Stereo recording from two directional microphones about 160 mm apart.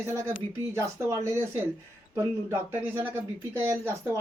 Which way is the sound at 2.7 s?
15° right (ahead or behind).